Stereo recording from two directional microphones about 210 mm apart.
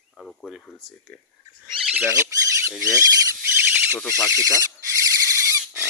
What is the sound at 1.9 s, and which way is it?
Speech, 10° right (ahead or behind).